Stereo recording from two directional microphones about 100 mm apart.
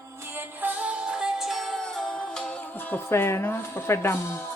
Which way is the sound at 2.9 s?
25° left (ahead or behind).